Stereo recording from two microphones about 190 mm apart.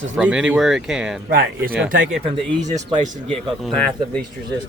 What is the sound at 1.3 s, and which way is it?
Speech, 50° right (ahead or behind).